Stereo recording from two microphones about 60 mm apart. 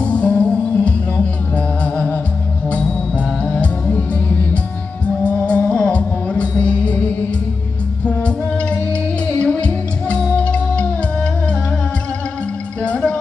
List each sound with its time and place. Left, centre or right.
0.0 s music: left
8.1 s music: centre
12.8 s music: centre